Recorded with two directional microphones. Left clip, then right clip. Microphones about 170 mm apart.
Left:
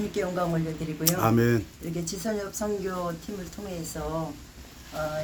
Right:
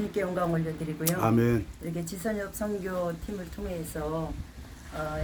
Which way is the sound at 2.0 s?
20° right (ahead or behind).